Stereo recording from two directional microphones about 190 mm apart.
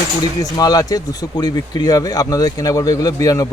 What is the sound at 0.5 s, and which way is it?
Speech, 20° left (ahead or behind).